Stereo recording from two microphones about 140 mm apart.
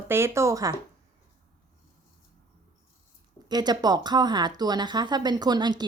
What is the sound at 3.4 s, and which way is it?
Speech, 30° right (ahead or behind).